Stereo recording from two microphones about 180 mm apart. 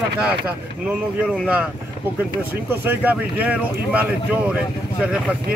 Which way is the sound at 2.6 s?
10° right (ahead or behind).